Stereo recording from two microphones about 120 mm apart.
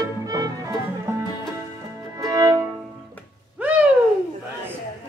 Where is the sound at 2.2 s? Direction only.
30° right (ahead or behind).